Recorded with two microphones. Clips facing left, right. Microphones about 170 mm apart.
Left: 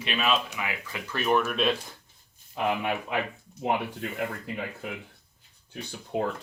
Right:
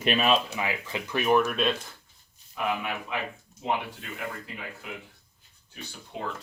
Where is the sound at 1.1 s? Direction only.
15° right (ahead or behind).